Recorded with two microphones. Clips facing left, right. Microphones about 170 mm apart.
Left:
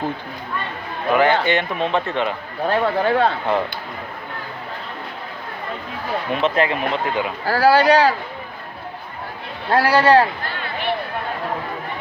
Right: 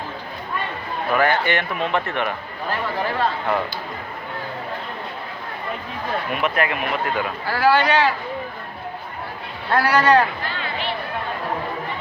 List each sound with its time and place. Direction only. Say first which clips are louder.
1.1 s speech: left 3 dB; 20° left (ahead or behind)
2.6 s speech: left 7 dB; 65° left (ahead or behind)
6.3 s speech: left 5 dB; 30° left (ahead or behind)
7.4 s speech: left 4 dB; 40° left (ahead or behind)
9.6 s speech: left 2 dB; 30° left (ahead or behind)